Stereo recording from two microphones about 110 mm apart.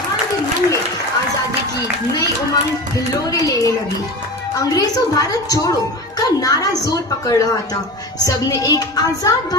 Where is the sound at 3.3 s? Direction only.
35° left (ahead or behind).